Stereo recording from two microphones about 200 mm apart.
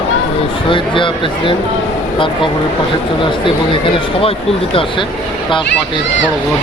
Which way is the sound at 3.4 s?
25° left (ahead or behind).